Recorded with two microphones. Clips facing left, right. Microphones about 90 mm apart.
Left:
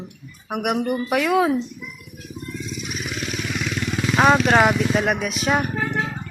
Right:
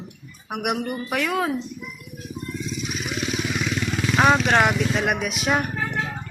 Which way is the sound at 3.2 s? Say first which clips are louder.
Right 2 dB; 5° right (ahead or behind).